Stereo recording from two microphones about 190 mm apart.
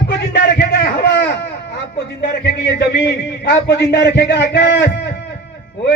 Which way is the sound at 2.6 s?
65° left (ahead or behind).